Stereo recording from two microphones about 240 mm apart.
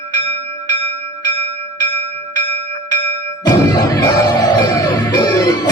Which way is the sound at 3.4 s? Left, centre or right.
Centre.